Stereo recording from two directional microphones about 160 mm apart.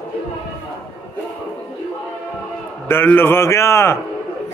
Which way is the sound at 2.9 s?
15° left (ahead or behind).